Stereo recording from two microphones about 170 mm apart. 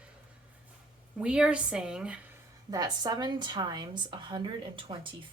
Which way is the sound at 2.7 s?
20° right (ahead or behind).